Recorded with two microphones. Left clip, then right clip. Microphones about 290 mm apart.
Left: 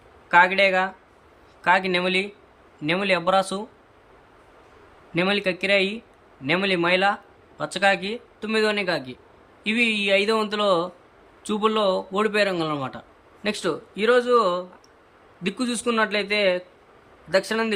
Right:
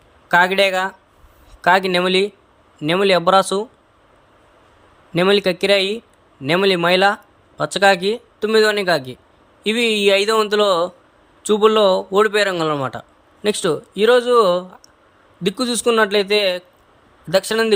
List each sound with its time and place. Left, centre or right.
0.3 s a man's voice: centre
5.1 s a man's voice: centre